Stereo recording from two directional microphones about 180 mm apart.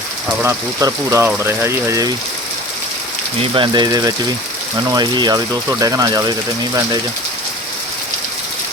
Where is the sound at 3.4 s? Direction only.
30° right (ahead or behind).